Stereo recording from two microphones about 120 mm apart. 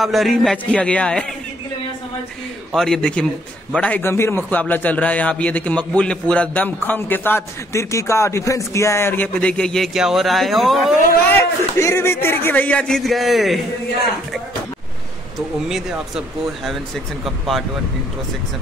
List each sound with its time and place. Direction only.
0.0 s speech: centre (ahead or behind)
2.7 s a man's voice: 5° left (ahead or behind)
11.2 s a man's voice: 20° left (ahead or behind); by 13.6 s centre (ahead or behind)
15.7 s speech: centre (ahead or behind)